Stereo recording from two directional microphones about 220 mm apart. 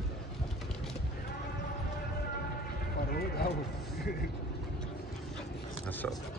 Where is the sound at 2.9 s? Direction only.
45° left (ahead or behind).